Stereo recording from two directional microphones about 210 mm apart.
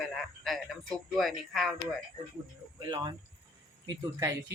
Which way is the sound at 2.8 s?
20° right (ahead or behind).